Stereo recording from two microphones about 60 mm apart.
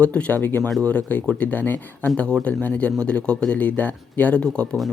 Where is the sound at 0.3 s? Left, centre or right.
Left.